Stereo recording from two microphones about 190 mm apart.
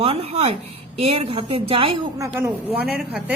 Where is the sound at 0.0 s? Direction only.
30° right (ahead or behind).